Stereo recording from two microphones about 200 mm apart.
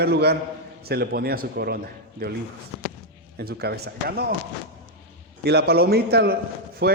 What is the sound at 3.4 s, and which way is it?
Speech, 50° right (ahead or behind).